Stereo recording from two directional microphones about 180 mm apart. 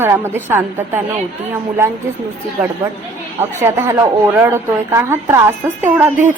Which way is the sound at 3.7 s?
15° right (ahead or behind).